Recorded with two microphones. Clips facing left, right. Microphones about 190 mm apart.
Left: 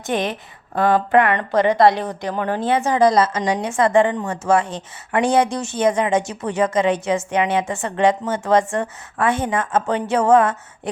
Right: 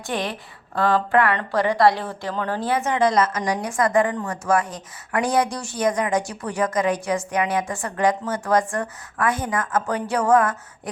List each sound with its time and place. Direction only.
0.0 s a woman's voice: 20° left (ahead or behind)